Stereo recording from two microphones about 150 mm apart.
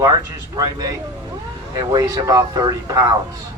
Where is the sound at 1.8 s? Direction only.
25° right (ahead or behind).